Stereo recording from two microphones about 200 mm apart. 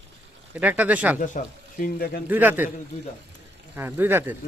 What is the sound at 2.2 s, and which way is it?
Speech, 10° right (ahead or behind).